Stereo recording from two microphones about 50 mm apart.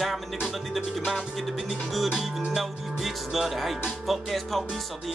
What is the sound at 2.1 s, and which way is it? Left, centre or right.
Music, centre.